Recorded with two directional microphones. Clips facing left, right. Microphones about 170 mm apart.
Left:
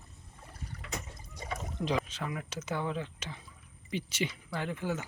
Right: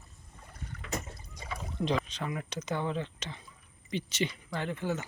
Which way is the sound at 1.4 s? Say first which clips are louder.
Left 2 dB; 45° left (ahead or behind).